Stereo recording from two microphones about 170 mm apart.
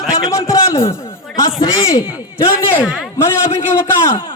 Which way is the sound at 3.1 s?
15° left (ahead or behind).